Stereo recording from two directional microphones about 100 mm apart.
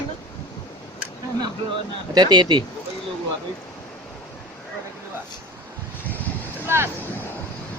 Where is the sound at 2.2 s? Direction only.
45° right (ahead or behind).